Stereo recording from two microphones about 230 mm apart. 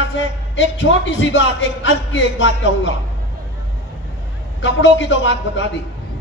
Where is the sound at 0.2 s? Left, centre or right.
Left.